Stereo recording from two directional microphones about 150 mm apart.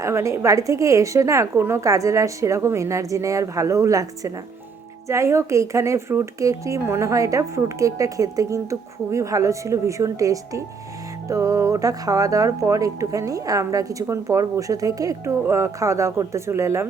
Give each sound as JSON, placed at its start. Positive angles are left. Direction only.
{"t": 0.0, "sound": "speech", "side_deg": -20}